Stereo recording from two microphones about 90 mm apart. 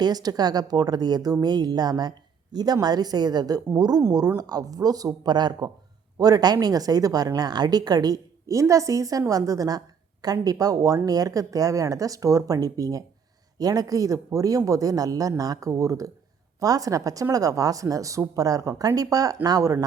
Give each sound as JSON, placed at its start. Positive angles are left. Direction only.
{"t": 0.0, "sound": "a man's voice", "side_deg": -50}